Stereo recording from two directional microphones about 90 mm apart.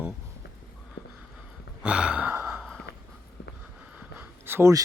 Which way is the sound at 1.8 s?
15° right (ahead or behind).